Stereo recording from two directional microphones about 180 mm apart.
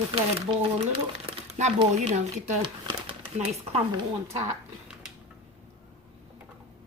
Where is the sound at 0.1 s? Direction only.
30° right (ahead or behind).